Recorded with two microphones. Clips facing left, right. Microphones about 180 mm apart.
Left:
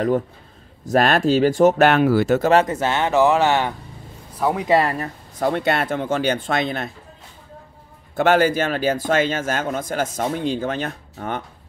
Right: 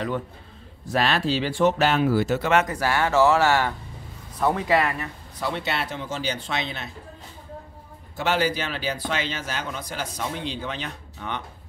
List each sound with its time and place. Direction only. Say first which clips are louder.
0.8 s speech: left 6 dB; 50° left (ahead or behind)
1.9 s speech: left 5 dB; 65° left (ahead or behind)
2.3 s speech: left 8 dB; 40° left (ahead or behind)
2.6 s speech: left 3 dB; 25° left (ahead or behind)
4.4 s speech: left 2 dB; 10° left (ahead or behind)
4.6 s speech: left 7 dB; 25° left (ahead or behind)
4.9 s speech: left 6 dB; 45° left (ahead or behind)
8.2 s speech: left 7 dB; 50° left (ahead or behind)